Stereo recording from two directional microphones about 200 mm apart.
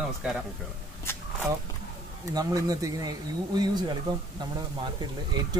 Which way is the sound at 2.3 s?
20° right (ahead or behind).